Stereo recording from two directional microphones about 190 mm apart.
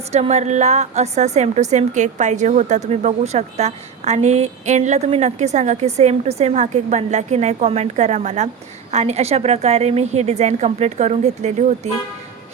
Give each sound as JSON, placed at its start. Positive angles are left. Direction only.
{"t": 0.1, "sound": "a woman's voice", "side_deg": -35}